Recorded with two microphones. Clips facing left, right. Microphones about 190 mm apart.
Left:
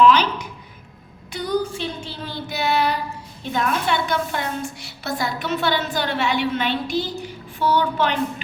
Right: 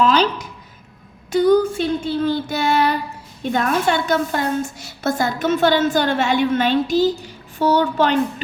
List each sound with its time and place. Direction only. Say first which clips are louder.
0.0 s a woman's voice: left 1 dB; 40° right (ahead or behind)
1.3 s a woman's voice: right 9 dB; 50° right (ahead or behind)
2.2 s child singing: right 1 dB; 45° right (ahead or behind)
3.5 s a woman's voice: right 3 dB; 45° right (ahead or behind)